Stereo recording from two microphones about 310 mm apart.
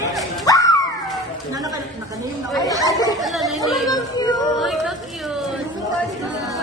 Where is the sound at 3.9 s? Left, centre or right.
Centre.